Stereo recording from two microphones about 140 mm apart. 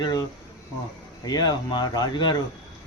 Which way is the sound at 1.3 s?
30° left (ahead or behind).